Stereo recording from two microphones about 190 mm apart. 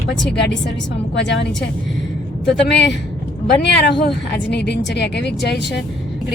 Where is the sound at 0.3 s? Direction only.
70° left (ahead or behind).